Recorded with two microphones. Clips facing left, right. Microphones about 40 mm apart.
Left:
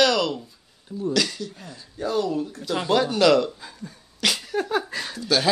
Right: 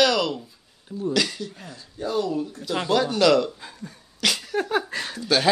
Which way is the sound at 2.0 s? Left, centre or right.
Left.